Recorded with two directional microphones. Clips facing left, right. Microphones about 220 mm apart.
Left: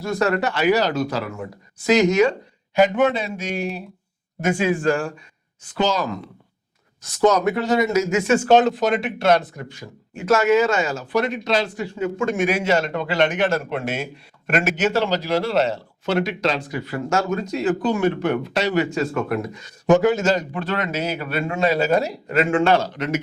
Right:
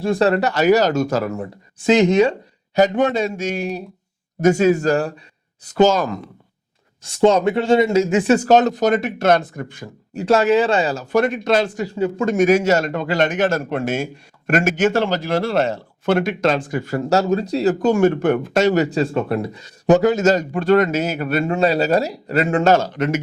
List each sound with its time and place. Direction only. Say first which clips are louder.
0.0 s speech: right 4 dB; 30° right (ahead or behind)
1.9 s speech: right 2 dB; 30° right (ahead or behind)
2.7 s a man's voice: right 1 dB; 40° right (ahead or behind)
7.0 s speech: right 3 dB; 30° right (ahead or behind); by 9.9 s 50° right (ahead or behind)
10.2 s speech: right 2 dB; 35° right (ahead or behind); by 11.9 s 50° right (ahead or behind)
11.9 s a man's voice: right 4 dB; 35° right (ahead or behind)